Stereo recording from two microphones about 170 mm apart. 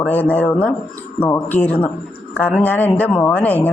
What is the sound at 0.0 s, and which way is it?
Speech, 10° left (ahead or behind).